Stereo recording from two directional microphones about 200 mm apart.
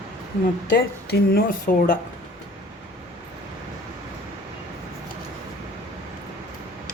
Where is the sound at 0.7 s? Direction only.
50° left (ahead or behind).